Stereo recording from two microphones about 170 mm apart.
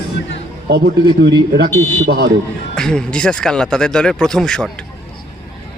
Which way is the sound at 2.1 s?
75° right (ahead or behind).